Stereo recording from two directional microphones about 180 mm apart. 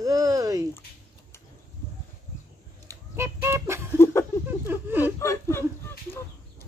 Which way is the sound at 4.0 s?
15° left (ahead or behind).